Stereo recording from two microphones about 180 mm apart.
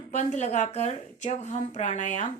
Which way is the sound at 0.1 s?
40° left (ahead or behind).